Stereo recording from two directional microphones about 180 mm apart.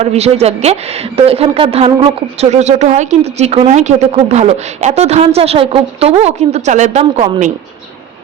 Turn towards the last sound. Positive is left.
turn(degrees=-40)  # may be behind; listen again after turning